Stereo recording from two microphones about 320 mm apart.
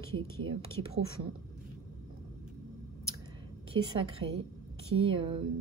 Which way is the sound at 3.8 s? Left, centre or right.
Centre.